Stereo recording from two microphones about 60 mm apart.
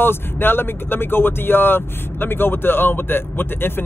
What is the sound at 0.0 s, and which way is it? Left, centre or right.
Speech, left.